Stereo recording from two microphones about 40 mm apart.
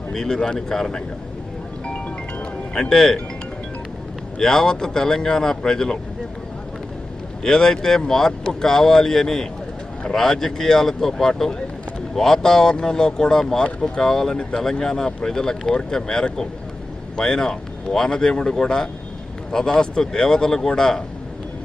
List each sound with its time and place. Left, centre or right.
0.1 s speech: centre
1.9 s wind chime: left
2.9 s speech: centre
4.4 s speech: centre
7.4 s speech: centre